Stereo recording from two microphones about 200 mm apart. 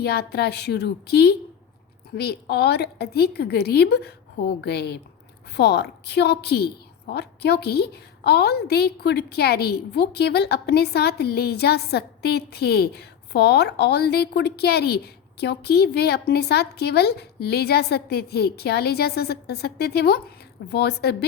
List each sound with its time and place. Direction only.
0.0 s a woman's voice: 55° left (ahead or behind)